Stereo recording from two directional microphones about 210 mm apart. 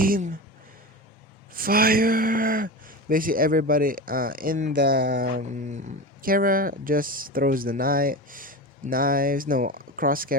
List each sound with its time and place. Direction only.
0.0 s speech: 40° right (ahead or behind)
1.5 s speech: 45° right (ahead or behind)